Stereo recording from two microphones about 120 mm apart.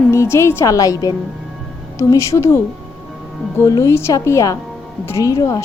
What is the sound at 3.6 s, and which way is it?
A woman's voice, 30° left (ahead or behind).